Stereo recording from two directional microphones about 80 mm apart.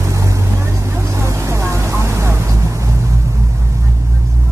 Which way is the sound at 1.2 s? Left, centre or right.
Right.